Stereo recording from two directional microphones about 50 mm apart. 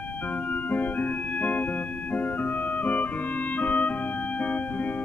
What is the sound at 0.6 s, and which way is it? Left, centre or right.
Organ, left.